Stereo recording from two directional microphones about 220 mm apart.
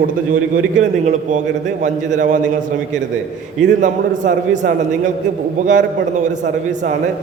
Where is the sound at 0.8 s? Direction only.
35° right (ahead or behind).